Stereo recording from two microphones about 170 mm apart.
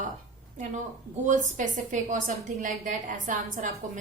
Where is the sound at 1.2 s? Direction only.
45° right (ahead or behind).